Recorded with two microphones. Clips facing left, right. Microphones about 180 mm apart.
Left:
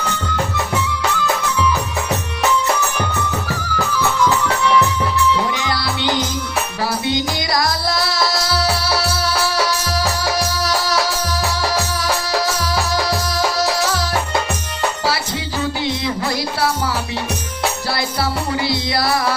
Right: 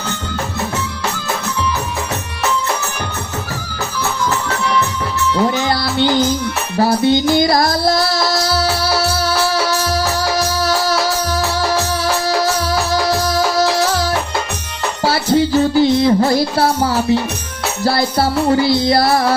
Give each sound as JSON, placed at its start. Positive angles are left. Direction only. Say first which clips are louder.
{"t": 7.3, "sound": "music", "louder": "right 7 dB", "side_deg": -50}
{"t": 16.0, "sound": "music", "louder": "right 9 dB", "side_deg": -30}
{"t": 16.6, "sound": "music", "louder": "right 5 dB", "side_deg": -50}